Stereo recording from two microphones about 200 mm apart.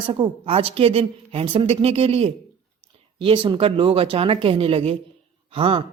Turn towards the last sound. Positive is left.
turn(degrees=-25)  # may be behind; listen again after turning